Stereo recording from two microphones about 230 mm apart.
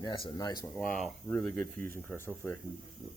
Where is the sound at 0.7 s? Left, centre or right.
Centre.